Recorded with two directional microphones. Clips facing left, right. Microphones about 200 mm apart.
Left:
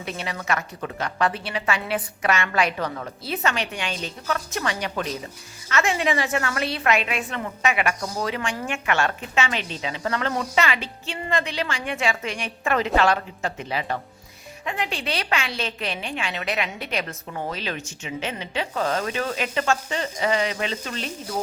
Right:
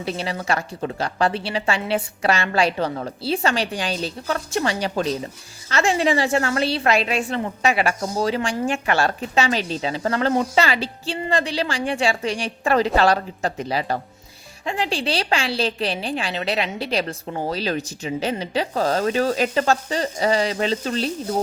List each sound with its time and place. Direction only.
0.0 s a woman's voice: 30° right (ahead or behind)